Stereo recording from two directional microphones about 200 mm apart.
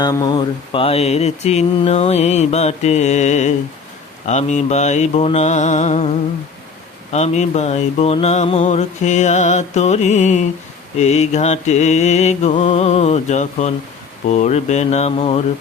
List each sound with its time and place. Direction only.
0.0 s mantra: 20° left (ahead or behind)